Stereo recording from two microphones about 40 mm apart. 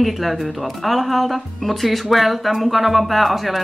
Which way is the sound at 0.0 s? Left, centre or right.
Centre.